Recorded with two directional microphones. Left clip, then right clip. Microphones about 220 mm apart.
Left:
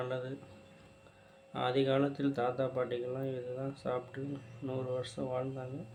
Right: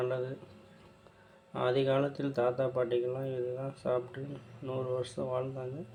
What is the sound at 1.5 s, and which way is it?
Speech, 5° right (ahead or behind).